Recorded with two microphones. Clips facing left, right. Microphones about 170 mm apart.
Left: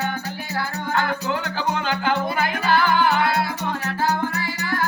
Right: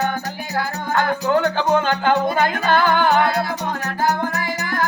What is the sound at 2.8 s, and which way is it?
Music, 50° right (ahead or behind).